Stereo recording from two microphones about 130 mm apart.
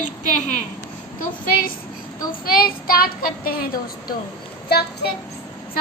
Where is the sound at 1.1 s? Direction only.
90° left.